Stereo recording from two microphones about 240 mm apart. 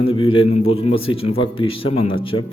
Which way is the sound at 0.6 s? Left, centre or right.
Left.